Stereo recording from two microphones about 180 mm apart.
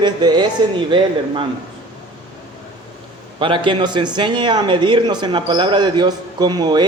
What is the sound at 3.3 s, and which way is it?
Speech, 30° right (ahead or behind).